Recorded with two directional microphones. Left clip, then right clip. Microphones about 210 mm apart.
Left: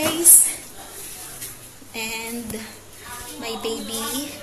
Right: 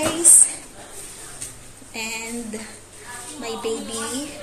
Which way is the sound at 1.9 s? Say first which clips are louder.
Even; centre (ahead or behind).